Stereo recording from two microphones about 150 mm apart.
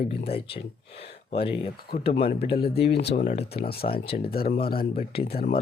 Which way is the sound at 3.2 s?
45° left (ahead or behind).